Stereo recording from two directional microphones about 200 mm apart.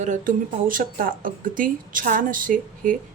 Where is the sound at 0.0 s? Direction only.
40° right (ahead or behind).